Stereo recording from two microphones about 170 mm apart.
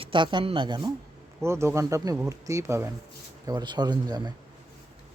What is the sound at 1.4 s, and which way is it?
Speech, 15° right (ahead or behind).